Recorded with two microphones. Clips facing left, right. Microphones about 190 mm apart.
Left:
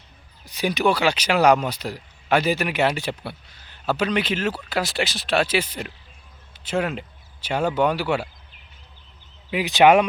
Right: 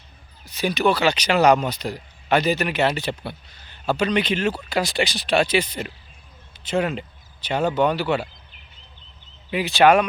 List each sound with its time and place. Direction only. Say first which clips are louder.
0.4 s speech: right 1 dB; 15° left (ahead or behind)
9.5 s speech: left 1 dB; 15° left (ahead or behind)